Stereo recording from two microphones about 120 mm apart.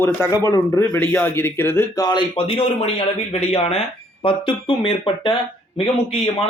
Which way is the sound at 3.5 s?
55° left (ahead or behind).